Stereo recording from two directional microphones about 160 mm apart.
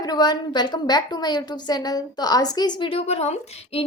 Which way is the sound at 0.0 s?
25° left (ahead or behind).